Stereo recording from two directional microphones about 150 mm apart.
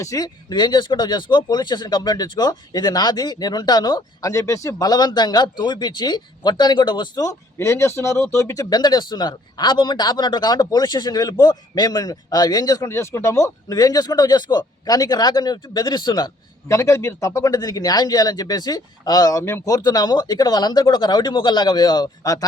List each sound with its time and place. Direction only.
0.0 s speech: 25° left (ahead or behind)